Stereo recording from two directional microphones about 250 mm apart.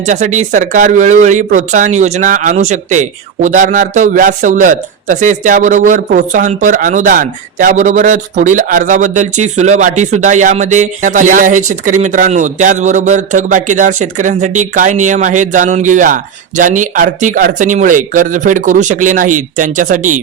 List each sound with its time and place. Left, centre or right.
0.0 s speech: right